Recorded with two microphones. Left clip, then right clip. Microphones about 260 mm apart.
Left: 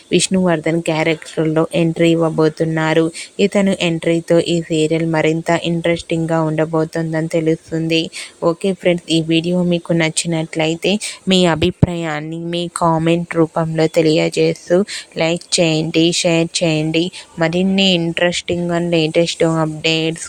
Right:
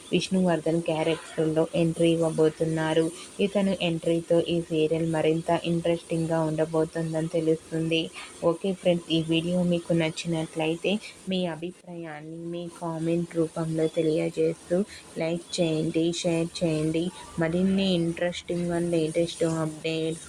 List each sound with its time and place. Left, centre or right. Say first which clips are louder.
0.1 s speech: left 10 dB; left
11.3 s speech: left 17 dB; left